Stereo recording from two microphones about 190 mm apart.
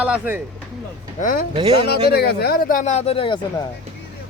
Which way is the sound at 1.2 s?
45° left (ahead or behind).